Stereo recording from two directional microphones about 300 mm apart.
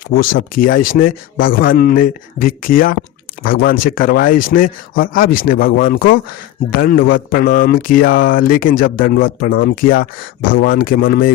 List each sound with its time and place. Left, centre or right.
0.1 s speech: left